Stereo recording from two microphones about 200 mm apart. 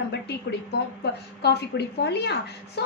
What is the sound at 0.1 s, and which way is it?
A woman's voice, 55° left (ahead or behind).